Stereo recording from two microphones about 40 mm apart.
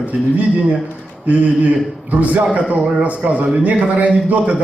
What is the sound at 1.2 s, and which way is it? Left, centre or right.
A man's voice, right.